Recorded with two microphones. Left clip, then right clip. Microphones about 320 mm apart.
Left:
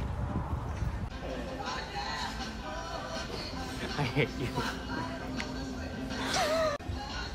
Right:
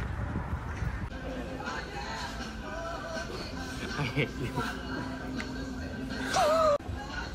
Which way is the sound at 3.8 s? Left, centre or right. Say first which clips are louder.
Left 1 dB; left.